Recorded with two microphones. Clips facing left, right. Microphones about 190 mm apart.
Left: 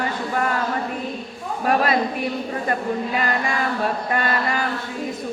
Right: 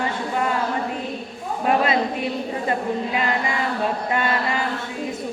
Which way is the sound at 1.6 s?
20° right (ahead or behind).